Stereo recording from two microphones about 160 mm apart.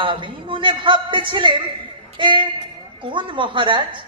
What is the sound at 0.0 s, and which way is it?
A man's voice, 30° right (ahead or behind).